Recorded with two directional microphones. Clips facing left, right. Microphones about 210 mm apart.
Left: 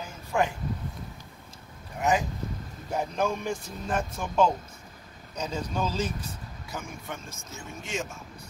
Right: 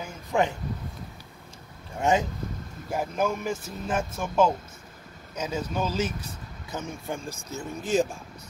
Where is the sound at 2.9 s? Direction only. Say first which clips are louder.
Right 1 dB; 5° right (ahead or behind).